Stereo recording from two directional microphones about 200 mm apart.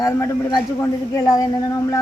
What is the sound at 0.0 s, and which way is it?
Speech, 15° left (ahead or behind).